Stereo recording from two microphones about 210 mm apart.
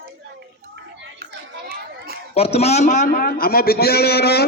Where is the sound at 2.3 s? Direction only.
30° left (ahead or behind).